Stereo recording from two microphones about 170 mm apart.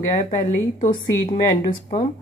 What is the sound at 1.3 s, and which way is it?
Speech, 40° left (ahead or behind).